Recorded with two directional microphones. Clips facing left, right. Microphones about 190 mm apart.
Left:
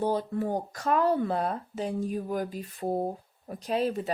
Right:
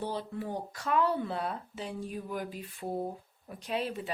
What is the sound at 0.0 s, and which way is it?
Speech, 45° left (ahead or behind).